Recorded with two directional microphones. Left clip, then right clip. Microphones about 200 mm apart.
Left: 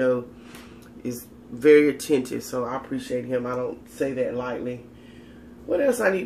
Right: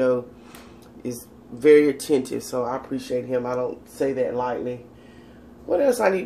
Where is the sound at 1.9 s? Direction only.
30° left (ahead or behind).